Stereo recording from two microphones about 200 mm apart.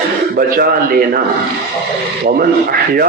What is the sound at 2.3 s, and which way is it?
Speech, 50° right (ahead or behind).